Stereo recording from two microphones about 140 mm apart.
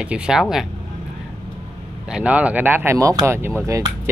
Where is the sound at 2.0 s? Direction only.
10° right (ahead or behind).